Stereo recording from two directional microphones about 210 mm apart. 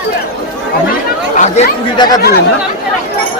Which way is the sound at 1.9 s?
20° left (ahead or behind).